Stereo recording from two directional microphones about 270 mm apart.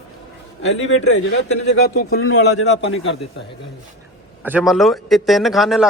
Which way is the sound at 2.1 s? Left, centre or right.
Left.